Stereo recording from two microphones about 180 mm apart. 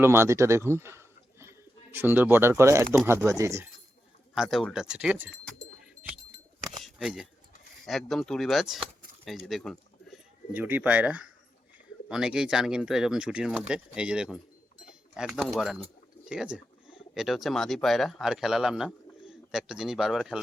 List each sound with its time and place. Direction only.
0.0 s speech: 15° right (ahead or behind)
4.4 s speech: centre (ahead or behind)
5.5 s bird: 5° right (ahead or behind)
6.8 s shuffling cards: centre (ahead or behind)
7.9 s speech: centre (ahead or behind)
16.3 s a sound: 5° right (ahead or behind)
17.2 s speech: centre (ahead or behind)